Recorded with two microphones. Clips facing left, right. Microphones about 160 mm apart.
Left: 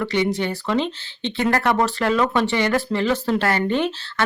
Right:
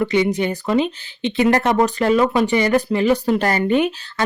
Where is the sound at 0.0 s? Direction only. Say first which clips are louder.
Right 4 dB; 15° right (ahead or behind).